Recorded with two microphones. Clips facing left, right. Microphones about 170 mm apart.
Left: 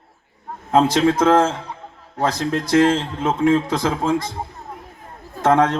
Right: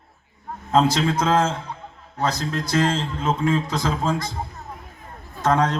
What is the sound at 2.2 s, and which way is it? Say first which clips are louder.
A man's voice: left 4 dB; 55° left (ahead or behind).